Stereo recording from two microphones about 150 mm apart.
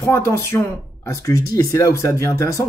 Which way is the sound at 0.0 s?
20° left (ahead or behind).